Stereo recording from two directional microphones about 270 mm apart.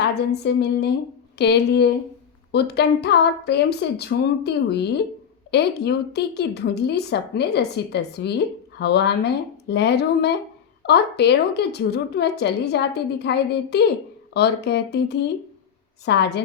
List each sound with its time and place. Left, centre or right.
0.4 s a woman's voice: left